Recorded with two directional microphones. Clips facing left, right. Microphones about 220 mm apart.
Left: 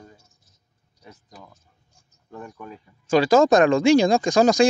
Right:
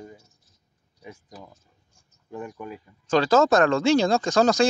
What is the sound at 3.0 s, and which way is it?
Speech, 10° left (ahead or behind).